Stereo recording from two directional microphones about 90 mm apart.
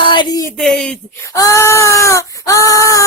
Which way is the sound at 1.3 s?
35° left (ahead or behind).